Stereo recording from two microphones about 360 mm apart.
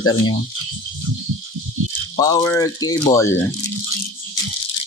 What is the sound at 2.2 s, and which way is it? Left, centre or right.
Speech, centre.